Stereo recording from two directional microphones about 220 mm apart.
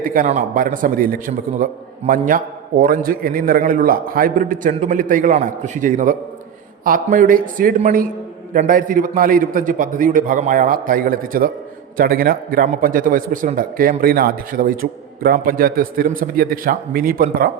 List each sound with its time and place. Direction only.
0.0 s a man's voice: 40° right (ahead or behind)